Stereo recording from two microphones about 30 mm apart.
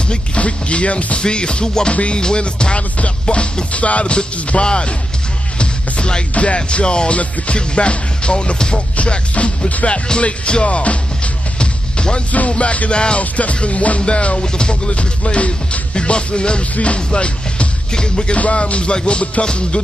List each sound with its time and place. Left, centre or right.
0.4 s music: left
8.9 s music: left
11.6 s music: left
12.3 s music: left
12.9 s music: left
13.2 s music: left
15.9 s music: left
16.7 s music: left
17.9 s music: left
18.3 s music: left